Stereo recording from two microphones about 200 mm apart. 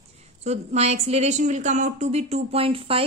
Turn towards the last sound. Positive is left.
turn(degrees=-30)  # may be behind; listen again after turning